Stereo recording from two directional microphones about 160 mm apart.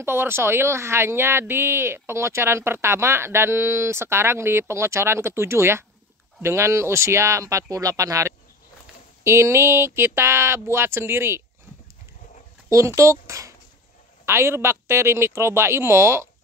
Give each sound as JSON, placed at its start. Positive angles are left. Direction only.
{"t": 0.0, "sound": "speech", "side_deg": -15}
{"t": 12.6, "sound": "speech", "side_deg": -20}